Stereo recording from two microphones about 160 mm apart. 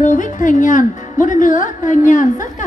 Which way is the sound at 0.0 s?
50° left (ahead or behind).